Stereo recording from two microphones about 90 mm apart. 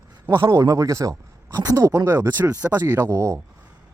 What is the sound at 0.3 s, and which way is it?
Speech, 60° right (ahead or behind).